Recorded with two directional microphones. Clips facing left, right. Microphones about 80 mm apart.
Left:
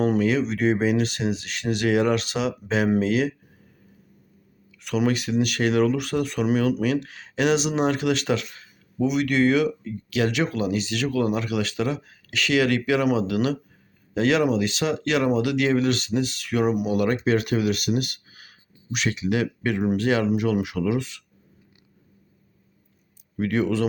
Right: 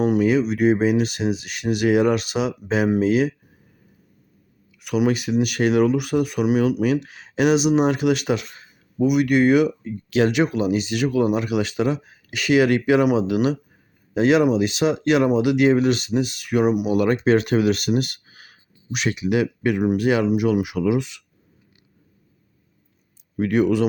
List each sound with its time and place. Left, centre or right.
0.0 s speech: centre
4.8 s speech: centre; by 18.6 s right
18.9 s speech: right
23.4 s speech: centre